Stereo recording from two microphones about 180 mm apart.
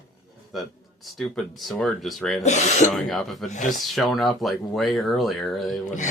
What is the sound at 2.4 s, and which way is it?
Speech, 40° left (ahead or behind).